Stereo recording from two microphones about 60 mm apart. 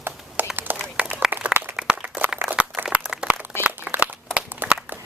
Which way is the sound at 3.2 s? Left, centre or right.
Centre.